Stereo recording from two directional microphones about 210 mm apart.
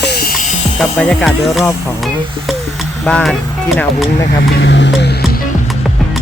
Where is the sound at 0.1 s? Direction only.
45° left (ahead or behind).